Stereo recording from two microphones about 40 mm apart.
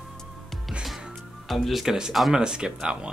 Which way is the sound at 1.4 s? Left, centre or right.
Centre.